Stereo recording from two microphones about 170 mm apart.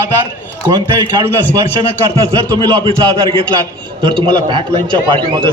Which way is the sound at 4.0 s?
30° right (ahead or behind).